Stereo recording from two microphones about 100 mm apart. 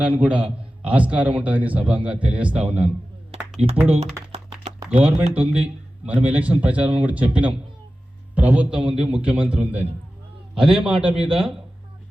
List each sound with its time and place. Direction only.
0.2 s a man's voice: 10° right (ahead or behind)
3.3 s a sound: 10° right (ahead or behind)
3.8 s a man's voice: 15° right (ahead or behind)